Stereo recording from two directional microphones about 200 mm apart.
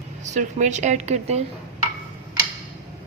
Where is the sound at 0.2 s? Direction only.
35° right (ahead or behind).